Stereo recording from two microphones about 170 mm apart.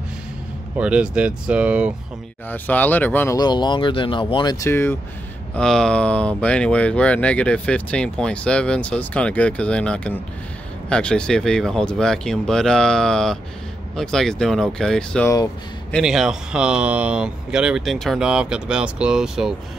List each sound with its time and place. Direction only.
0.7 s speech: 5° right (ahead or behind)
2.5 s speech: 10° left (ahead or behind)
3.3 s speech: 25° left (ahead or behind)
4.6 s speech: 15° left (ahead or behind); by 19.5 s 5° right (ahead or behind)